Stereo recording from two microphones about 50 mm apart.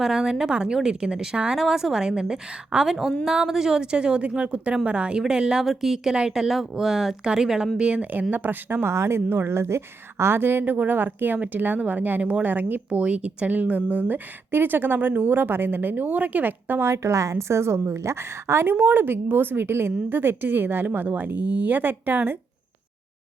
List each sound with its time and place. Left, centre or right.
0.0 s a woman's voice: centre
2.9 s a woman's voice: centre
5.6 s speech: centre
6.1 s a woman's voice: centre
8.3 s speech: right
10.3 s speech: right
16.8 s a woman's voice: right